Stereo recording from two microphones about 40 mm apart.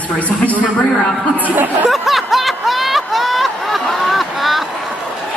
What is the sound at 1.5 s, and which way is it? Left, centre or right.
Speech, right.